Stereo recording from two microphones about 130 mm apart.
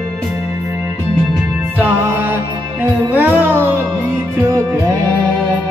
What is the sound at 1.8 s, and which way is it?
Music, 15° right (ahead or behind).